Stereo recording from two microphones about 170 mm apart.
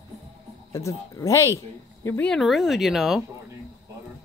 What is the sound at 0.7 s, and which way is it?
Speech, 15° left (ahead or behind).